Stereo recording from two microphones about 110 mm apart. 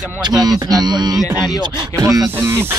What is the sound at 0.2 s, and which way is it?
Speech, 35° right (ahead or behind).